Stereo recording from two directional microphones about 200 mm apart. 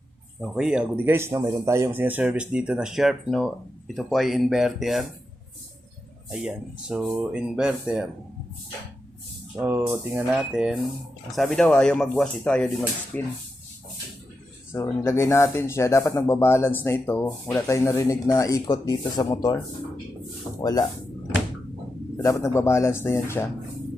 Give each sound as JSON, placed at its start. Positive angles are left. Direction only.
{"t": 0.4, "sound": "speech", "side_deg": 0}
{"t": 6.4, "sound": "speech", "side_deg": -5}
{"t": 9.6, "sound": "speech", "side_deg": -10}
{"t": 14.7, "sound": "speech", "side_deg": 15}
{"t": 22.2, "sound": "speech", "side_deg": 15}